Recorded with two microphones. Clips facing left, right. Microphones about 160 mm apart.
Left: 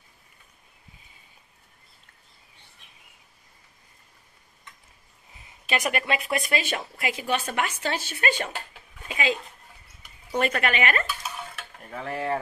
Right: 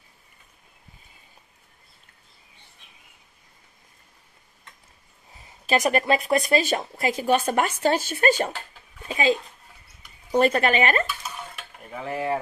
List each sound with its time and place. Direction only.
5.7 s speech: 40° right (ahead or behind)
9.0 s a sound: 35° right (ahead or behind)
10.3 s speech: 35° right (ahead or behind)
11.9 s cutlery: 5° right (ahead or behind)